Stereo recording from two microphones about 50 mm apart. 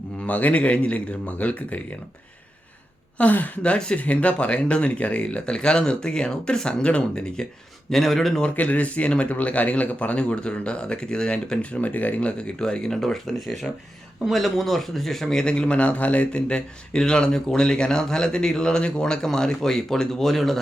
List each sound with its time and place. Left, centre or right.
0.2 s speech: left
3.2 s speech: left
3.6 s speech: left
7.9 s speech: centre
8.4 s speech: left
12.5 s speech: centre